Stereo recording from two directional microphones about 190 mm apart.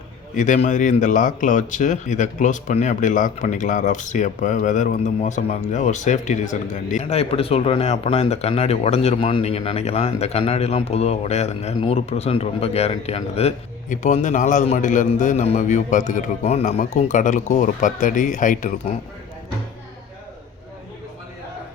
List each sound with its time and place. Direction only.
0.3 s speech: 40° left (ahead or behind)